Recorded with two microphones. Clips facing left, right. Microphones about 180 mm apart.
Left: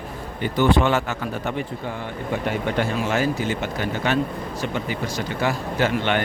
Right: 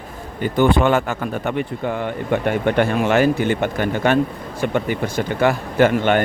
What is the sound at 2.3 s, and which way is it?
A man's voice, 60° right (ahead or behind).